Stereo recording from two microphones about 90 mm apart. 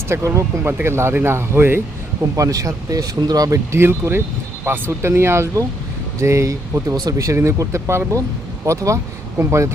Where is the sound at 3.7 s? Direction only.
30° right (ahead or behind).